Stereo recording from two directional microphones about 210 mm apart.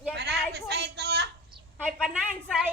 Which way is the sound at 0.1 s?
50° right (ahead or behind).